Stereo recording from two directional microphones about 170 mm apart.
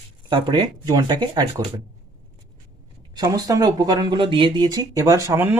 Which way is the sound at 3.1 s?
25° right (ahead or behind).